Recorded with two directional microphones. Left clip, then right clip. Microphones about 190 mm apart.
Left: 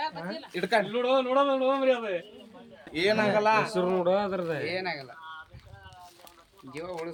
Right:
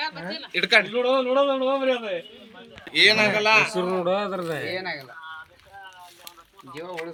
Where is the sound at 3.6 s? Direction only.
50° right (ahead or behind).